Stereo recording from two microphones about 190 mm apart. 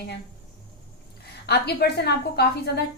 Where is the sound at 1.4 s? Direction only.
60° left (ahead or behind).